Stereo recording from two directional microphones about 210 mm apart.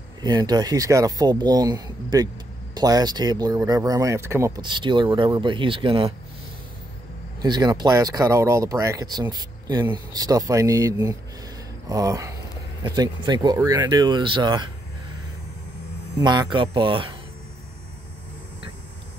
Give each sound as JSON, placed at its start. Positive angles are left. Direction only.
{"t": 0.2, "sound": "speech", "side_deg": -20}
{"t": 7.4, "sound": "speech", "side_deg": -20}
{"t": 16.2, "sound": "speech", "side_deg": -20}